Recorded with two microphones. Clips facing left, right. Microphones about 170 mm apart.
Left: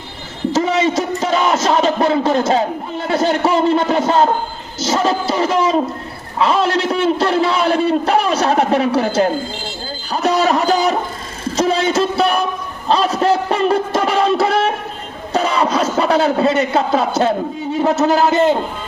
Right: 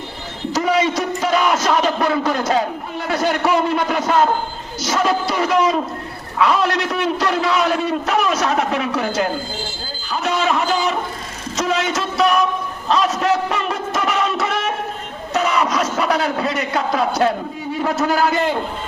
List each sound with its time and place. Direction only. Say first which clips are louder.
0.5 s a man's voice: left 2 dB; 25° left (ahead or behind)
10.1 s a sound: left 4 dB; 40° left (ahead or behind)
15.3 s a man's voice: left 2 dB; 30° left (ahead or behind)